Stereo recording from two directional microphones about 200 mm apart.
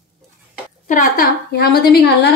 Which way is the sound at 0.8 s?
40° left (ahead or behind).